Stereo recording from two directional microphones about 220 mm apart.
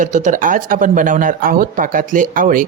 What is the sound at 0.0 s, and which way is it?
Speech, 35° right (ahead or behind).